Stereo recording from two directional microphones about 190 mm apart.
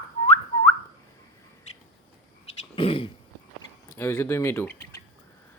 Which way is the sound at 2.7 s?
30° left (ahead or behind).